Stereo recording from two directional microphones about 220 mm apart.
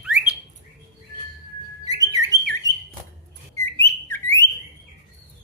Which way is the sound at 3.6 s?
10° left (ahead or behind).